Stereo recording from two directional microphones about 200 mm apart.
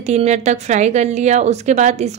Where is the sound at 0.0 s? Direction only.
35° right (ahead or behind).